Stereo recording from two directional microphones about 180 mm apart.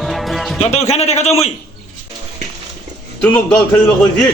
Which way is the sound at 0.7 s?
35° left (ahead or behind).